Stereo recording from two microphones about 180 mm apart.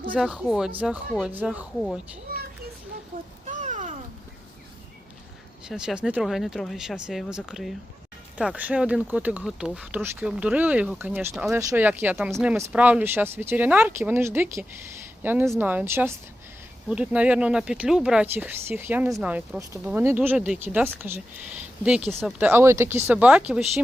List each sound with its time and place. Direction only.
0.1 s speech: 5° right (ahead or behind)
3.4 s a sound: 45° right (ahead or behind)
5.6 s speech: 5° right (ahead or behind)